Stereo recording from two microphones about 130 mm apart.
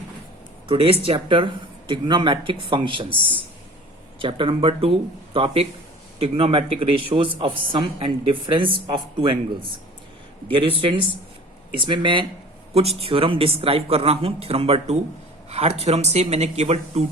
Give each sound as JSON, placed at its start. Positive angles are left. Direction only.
{"t": 0.7, "sound": "a man's voice", "side_deg": -45}
{"t": 4.2, "sound": "a man's voice", "side_deg": -40}
{"t": 12.7, "sound": "speech", "side_deg": -50}